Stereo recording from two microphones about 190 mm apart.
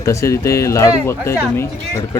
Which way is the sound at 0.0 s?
15° left (ahead or behind).